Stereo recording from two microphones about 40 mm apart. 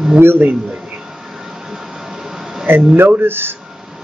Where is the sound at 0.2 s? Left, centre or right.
Right.